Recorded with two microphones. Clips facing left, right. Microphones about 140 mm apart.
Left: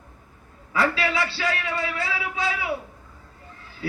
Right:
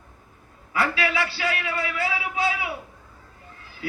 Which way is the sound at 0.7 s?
25° left (ahead or behind).